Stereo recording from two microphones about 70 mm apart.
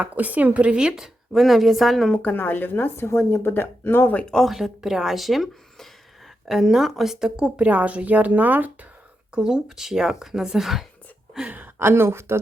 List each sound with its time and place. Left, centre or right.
0.0 s a woman's voice: right; by 2.0 s centre
2.0 s speech: left
3.1 s speech: left
4.3 s speech: centre
4.5 s speech: centre; by 8.9 s right
9.3 s a woman's voice: centre
11.4 s speech: right